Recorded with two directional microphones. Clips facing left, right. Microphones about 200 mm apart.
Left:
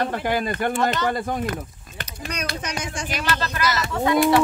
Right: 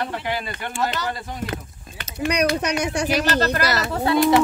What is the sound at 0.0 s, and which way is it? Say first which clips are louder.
Speech: left 4 dB; 50° left (ahead or behind).